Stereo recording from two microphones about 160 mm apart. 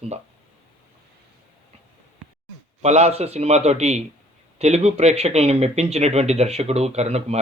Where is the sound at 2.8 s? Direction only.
40° right (ahead or behind).